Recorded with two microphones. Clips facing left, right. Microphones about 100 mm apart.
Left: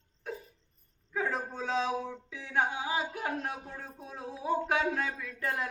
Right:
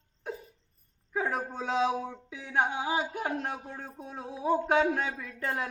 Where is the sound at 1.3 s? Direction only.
15° right (ahead or behind).